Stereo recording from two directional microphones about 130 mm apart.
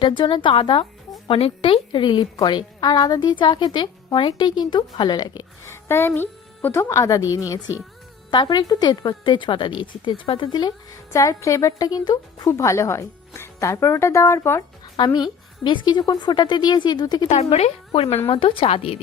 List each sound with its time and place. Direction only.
0.2 s a woman's voice: 40° left (ahead or behind); by 14.6 s 20° left (ahead or behind)
14.9 s a woman's voice: 35° left (ahead or behind)
17.2 s speech: 60° left (ahead or behind)